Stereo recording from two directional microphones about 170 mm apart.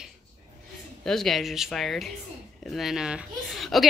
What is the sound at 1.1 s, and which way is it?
A woman's voice, centre (ahead or behind).